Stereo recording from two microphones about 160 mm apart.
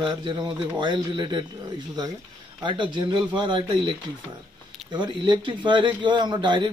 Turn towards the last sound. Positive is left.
turn(degrees=-30)  # may be behind; listen again after turning